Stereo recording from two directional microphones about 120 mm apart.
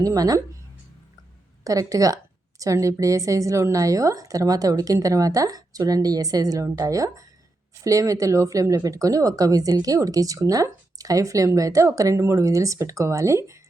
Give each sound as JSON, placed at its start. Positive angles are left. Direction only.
{"t": 0.0, "sound": "speech", "side_deg": -30}
{"t": 1.6, "sound": "speech", "side_deg": -30}